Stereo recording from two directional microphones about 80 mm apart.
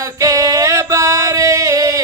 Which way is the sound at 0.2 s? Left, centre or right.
Right.